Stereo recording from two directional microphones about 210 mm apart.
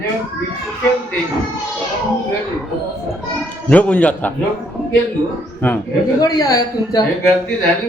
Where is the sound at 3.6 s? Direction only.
5° left (ahead or behind).